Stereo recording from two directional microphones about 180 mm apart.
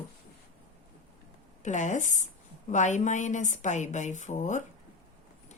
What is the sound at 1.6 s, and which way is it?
A woman's voice, 40° left (ahead or behind).